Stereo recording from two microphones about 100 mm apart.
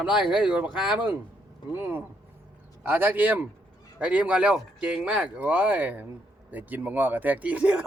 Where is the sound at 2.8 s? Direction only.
20° right (ahead or behind).